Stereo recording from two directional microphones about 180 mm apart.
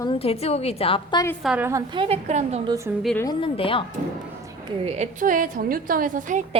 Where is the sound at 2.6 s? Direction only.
15° right (ahead or behind).